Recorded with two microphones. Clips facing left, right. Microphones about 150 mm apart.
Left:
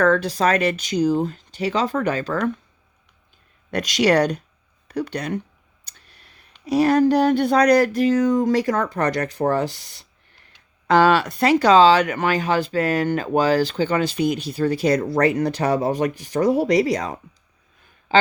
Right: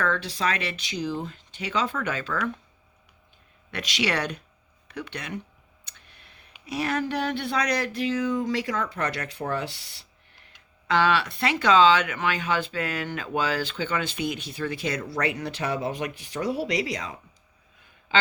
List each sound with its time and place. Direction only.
0.0 s speech: 45° left (ahead or behind)
3.7 s speech: 45° left (ahead or behind)
5.8 s tick: 40° left (ahead or behind)
6.7 s speech: 40° left (ahead or behind)
10.8 s speech: 45° left (ahead or behind)